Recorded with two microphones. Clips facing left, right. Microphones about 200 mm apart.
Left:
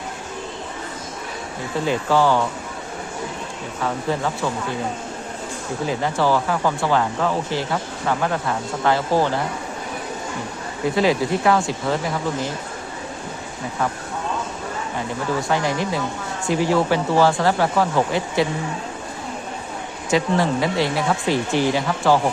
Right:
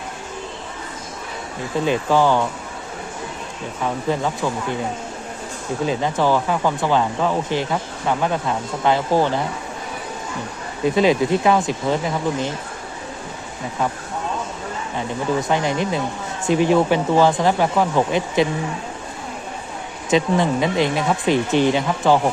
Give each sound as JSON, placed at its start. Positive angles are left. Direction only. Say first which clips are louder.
{"t": 1.8, "sound": "speech", "louder": "right 1 dB", "side_deg": -15}
{"t": 5.8, "sound": "speech", "louder": "right 1 dB", "side_deg": -20}
{"t": 10.8, "sound": "speech", "louder": "right 3 dB", "side_deg": -20}
{"t": 15.4, "sound": "speech", "louder": "even", "side_deg": -20}
{"t": 20.1, "sound": "speech", "louder": "right 2 dB", "side_deg": -20}